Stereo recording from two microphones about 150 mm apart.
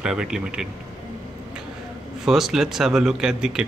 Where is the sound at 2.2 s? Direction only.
5° right (ahead or behind).